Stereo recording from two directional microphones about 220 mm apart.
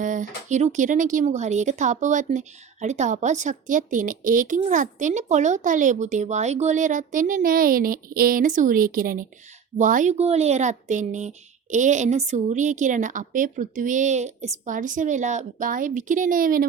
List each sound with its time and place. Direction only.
0.0 s speech: 35° right (ahead or behind)